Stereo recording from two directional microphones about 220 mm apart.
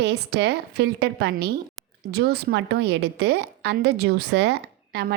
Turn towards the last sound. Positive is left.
turn(degrees=-50)  # may be behind; listen again after turning